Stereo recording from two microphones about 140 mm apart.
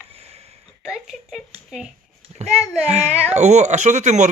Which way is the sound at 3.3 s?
55° right (ahead or behind).